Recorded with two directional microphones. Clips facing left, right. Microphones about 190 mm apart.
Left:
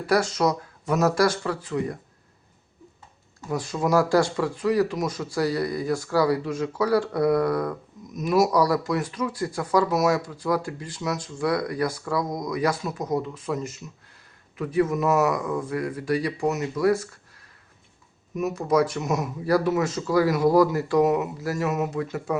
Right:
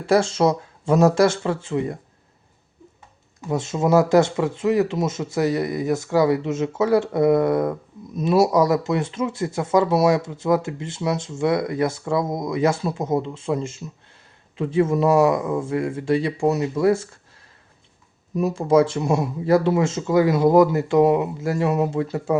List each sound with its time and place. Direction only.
0.0 s speech: 25° right (ahead or behind)
3.5 s speech: 25° right (ahead or behind)
18.3 s speech: 30° right (ahead or behind)